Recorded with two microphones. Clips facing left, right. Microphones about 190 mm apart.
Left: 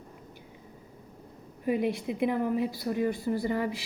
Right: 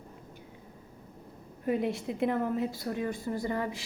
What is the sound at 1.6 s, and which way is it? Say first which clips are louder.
A woman's voice: left 2 dB; 5° left (ahead or behind).